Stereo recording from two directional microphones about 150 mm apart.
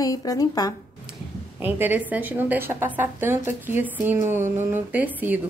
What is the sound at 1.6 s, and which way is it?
A woman's voice, 10° right (ahead or behind).